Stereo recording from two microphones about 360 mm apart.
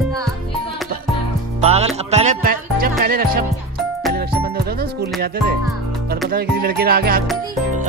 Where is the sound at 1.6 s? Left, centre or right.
Centre.